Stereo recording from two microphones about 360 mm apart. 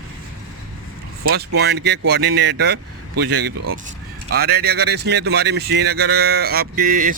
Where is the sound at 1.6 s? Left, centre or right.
Right.